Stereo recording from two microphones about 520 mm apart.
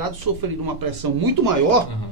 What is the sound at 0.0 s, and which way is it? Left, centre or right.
Speech, right.